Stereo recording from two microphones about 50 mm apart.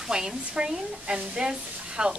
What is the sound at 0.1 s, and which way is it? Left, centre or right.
A woman's voice, centre.